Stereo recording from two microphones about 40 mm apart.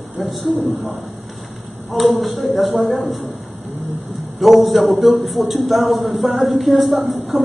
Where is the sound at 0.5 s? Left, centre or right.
Right.